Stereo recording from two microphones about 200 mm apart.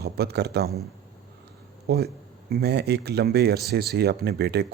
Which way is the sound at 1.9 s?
55° right (ahead or behind).